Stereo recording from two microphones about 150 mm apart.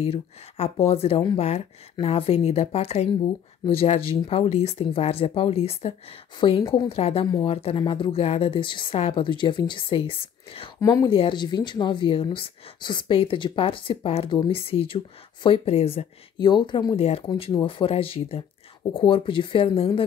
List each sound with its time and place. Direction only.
0.0 s speech: 40° left (ahead or behind)
10.8 s speech: 25° left (ahead or behind)
11.1 s speech: 35° left (ahead or behind)
16.3 s speech: 30° left (ahead or behind)